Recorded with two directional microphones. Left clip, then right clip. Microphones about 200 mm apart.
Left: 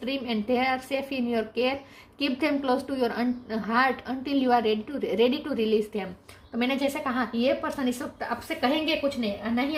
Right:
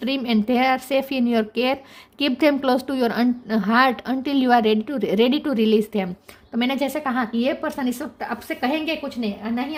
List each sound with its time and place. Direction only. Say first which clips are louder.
0.0 s a woman's voice: right 7 dB; 55° right (ahead or behind)